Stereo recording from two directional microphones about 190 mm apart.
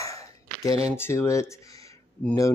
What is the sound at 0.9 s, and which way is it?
Speech, 15° left (ahead or behind).